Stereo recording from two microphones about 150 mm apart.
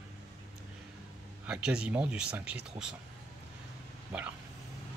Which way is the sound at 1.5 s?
5° right (ahead or behind).